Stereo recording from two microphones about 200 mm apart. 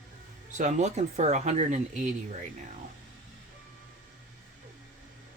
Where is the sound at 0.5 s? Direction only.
35° right (ahead or behind).